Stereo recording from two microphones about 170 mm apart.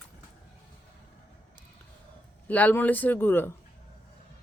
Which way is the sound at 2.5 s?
10° left (ahead or behind).